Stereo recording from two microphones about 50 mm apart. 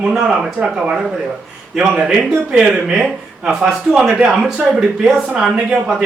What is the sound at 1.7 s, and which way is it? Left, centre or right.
Speech, centre.